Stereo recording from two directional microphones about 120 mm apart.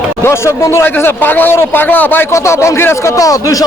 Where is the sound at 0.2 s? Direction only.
25° left (ahead or behind).